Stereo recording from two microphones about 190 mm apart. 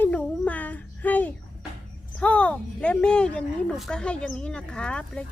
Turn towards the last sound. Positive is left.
turn(degrees=5)  # may be behind; listen again after turning